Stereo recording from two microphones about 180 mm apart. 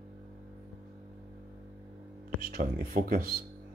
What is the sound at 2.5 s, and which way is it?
Speech, 50° right (ahead or behind).